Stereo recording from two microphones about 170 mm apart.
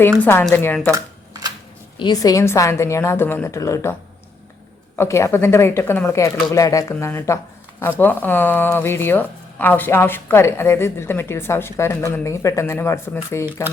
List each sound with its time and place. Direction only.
0.2 s speech: 15° left (ahead or behind)
0.9 s a sound: 20° right (ahead or behind)
2.0 s speech: 25° left (ahead or behind)
4.9 s speech: 15° left (ahead or behind)